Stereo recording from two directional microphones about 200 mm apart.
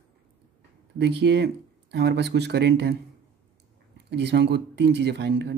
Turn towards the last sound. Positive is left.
turn(degrees=-60)  # may be behind; listen again after turning